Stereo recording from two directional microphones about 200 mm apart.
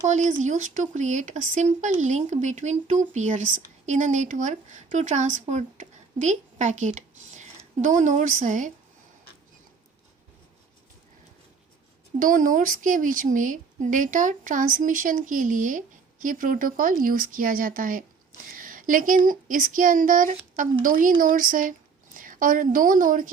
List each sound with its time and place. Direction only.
0.0 s a woman's voice: 35° right (ahead or behind)
12.2 s speech: 40° right (ahead or behind)